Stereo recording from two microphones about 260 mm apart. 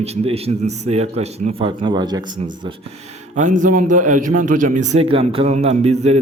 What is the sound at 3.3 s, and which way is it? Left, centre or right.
A man's voice, right.